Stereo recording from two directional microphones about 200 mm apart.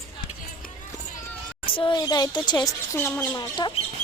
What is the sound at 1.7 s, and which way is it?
Speech, 25° left (ahead or behind).